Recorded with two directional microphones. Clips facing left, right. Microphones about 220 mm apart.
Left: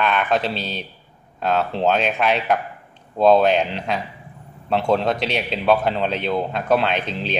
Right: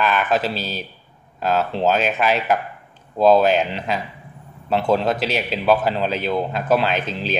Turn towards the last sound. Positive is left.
turn(degrees=0)  # may be behind; listen again after turning